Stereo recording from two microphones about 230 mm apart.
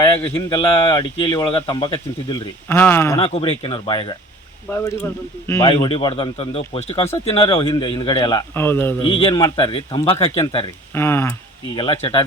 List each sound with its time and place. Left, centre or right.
0.3 s speech: left
2.6 s speech: centre
3.2 s speech: left
9.2 s speech: left
10.9 s speech: centre
11.8 s speech: left